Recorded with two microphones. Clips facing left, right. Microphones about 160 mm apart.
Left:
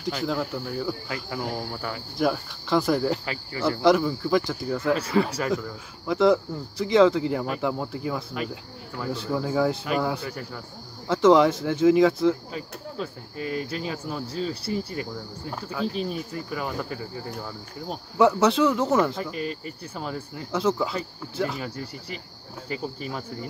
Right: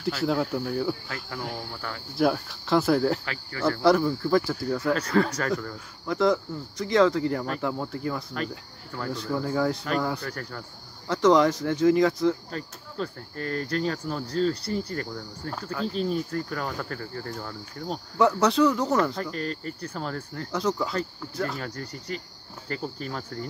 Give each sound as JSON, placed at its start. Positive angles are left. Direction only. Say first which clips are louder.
{"t": 0.0, "sound": "speech", "louder": "right 2 dB", "side_deg": -5}
{"t": 2.1, "sound": "speech", "louder": "right 2 dB", "side_deg": 0}
{"t": 3.5, "sound": "speech", "louder": "even", "side_deg": 15}
{"t": 4.4, "sound": "speech", "louder": "right 1 dB", "side_deg": 0}